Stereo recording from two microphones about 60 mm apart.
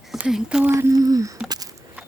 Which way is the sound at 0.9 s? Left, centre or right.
Right.